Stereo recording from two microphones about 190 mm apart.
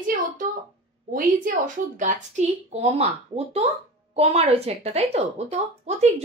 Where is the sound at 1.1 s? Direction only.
45° right (ahead or behind).